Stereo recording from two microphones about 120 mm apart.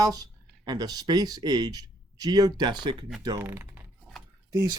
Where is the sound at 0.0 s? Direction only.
30° right (ahead or behind).